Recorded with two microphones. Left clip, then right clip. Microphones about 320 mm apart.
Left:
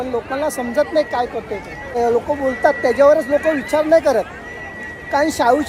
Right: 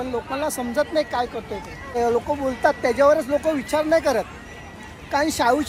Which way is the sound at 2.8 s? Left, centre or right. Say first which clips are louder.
Left 5 dB; centre.